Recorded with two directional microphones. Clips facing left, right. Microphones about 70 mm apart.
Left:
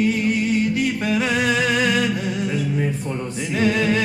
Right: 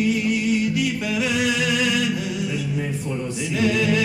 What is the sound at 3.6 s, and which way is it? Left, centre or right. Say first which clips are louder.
Music: left 1 dB; left.